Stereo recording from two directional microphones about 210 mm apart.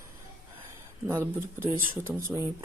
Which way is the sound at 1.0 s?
15° right (ahead or behind).